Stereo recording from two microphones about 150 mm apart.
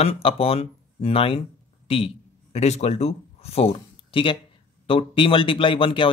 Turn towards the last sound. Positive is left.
turn(degrees=35)  # may be behind; listen again after turning